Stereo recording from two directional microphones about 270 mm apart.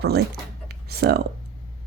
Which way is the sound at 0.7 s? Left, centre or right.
Right.